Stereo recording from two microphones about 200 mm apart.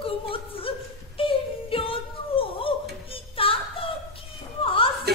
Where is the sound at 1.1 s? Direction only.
25° left (ahead or behind).